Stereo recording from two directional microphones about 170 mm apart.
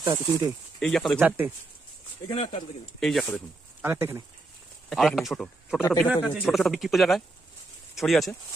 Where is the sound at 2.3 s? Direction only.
35° left (ahead or behind).